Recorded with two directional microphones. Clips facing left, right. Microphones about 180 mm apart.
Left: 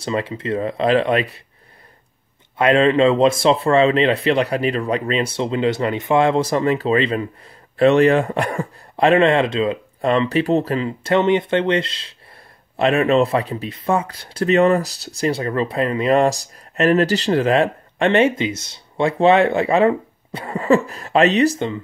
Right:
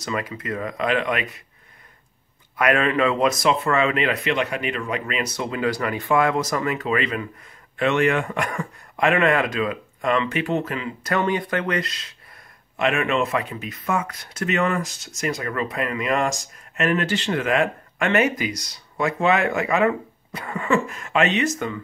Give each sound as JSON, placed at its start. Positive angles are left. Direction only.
{"t": 0.0, "sound": "speech", "side_deg": 30}
{"t": 2.5, "sound": "speech", "side_deg": 25}